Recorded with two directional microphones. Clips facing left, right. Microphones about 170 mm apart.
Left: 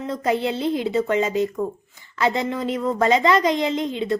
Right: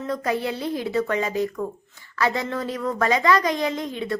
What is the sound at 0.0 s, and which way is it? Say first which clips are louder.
A woman's voice: left 3 dB; 25° left (ahead or behind).